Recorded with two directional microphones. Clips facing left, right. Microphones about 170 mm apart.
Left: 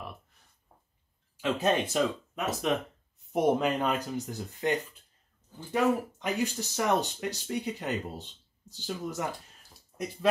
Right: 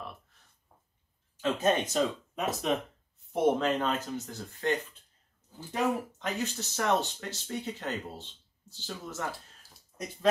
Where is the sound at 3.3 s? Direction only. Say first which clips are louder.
Left 1 dB; 15° left (ahead or behind).